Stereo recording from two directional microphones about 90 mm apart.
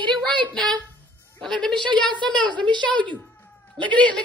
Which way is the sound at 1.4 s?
5° left (ahead or behind).